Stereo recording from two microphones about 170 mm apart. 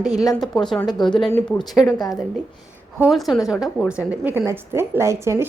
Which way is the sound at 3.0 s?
Centre (ahead or behind).